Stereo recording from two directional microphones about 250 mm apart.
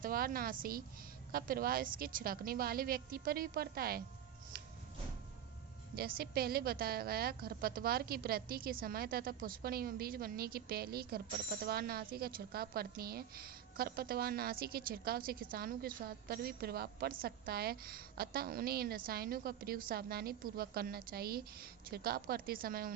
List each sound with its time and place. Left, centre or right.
0.0 s a woman's voice: right
4.5 s music: right
6.0 s a woman's voice: right